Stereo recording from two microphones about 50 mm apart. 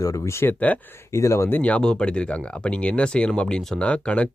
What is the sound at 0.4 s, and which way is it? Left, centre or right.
Speech, left.